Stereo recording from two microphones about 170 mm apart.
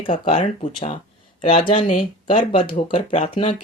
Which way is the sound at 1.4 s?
30° left (ahead or behind).